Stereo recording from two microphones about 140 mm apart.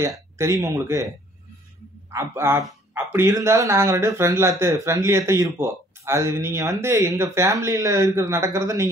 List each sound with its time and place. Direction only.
0.0 s speech: 20° right (ahead or behind)
2.0 s a man's voice: 20° right (ahead or behind)